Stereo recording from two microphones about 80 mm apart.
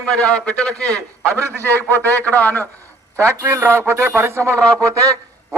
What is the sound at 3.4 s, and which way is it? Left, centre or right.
A man's voice, right.